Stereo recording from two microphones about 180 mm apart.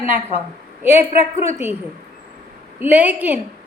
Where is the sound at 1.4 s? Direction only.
10° right (ahead or behind).